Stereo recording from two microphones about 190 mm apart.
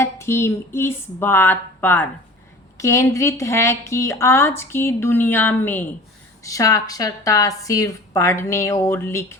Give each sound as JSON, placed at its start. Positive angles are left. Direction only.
{"t": 0.0, "sound": "a woman's voice", "side_deg": 15}